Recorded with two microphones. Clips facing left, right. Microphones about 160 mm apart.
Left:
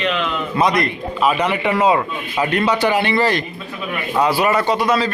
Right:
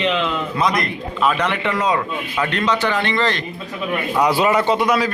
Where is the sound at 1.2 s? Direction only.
5° left (ahead or behind).